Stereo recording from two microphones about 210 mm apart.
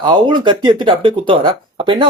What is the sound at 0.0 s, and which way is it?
Speech, 20° right (ahead or behind).